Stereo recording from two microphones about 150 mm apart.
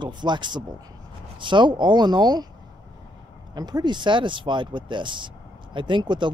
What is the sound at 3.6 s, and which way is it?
Speech, 25° right (ahead or behind).